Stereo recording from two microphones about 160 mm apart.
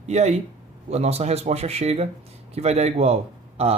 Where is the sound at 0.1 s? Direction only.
40° right (ahead or behind).